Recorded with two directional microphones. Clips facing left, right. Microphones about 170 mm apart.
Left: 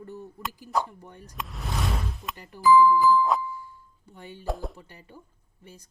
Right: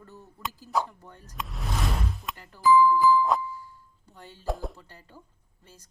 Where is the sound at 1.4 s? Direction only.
Centre (ahead or behind).